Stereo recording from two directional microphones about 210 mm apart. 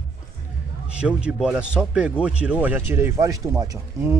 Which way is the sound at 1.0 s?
5° right (ahead or behind).